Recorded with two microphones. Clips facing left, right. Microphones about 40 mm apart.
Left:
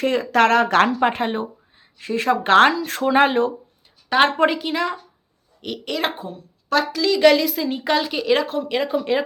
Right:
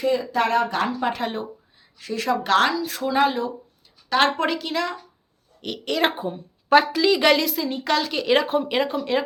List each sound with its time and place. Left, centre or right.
0.0 s speech: left
1.1 s speech: left
4.1 s speech: left
5.6 s a woman's voice: centre
6.2 s a woman's voice: right; by 7.6 s centre
7.6 s a woman's voice: centre
8.2 s a woman's voice: centre
8.4 s a woman's voice: centre
8.8 s a woman's voice: centre